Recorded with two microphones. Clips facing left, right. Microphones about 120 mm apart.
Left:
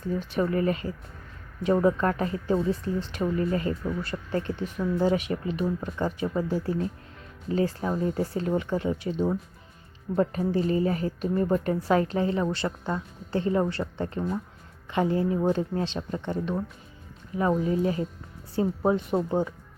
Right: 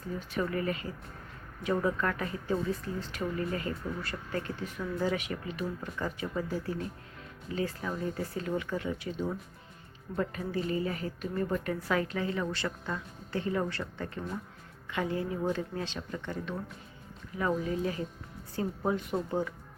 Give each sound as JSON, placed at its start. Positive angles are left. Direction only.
{"t": 0.3, "sound": "a woman's voice", "side_deg": 30}